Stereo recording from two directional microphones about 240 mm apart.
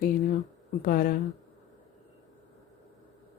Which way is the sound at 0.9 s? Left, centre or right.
Left.